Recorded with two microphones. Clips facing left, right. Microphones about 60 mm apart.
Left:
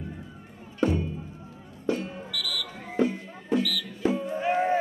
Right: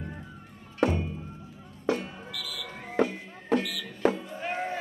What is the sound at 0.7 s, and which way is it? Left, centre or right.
Music, right.